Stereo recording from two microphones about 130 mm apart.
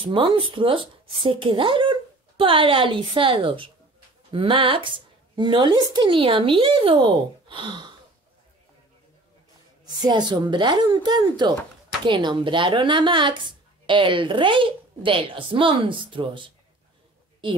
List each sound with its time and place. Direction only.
0.0 s speech: 40° right (ahead or behind)
10.0 s speech: 35° right (ahead or behind)